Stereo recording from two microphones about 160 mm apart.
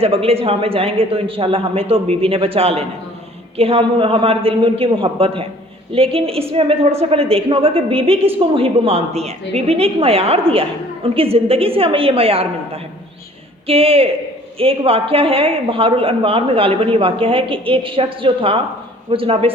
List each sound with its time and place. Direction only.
0.0 s a woman's voice: 35° right (ahead or behind)